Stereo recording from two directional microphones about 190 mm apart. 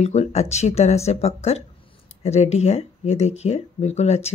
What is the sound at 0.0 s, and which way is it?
Speech, 35° left (ahead or behind).